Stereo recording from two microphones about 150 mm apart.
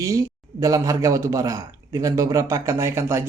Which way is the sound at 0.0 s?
25° right (ahead or behind).